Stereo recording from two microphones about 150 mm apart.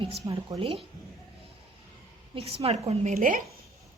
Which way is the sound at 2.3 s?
40° right (ahead or behind).